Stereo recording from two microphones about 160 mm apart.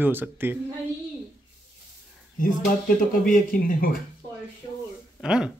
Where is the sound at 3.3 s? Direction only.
65° left (ahead or behind).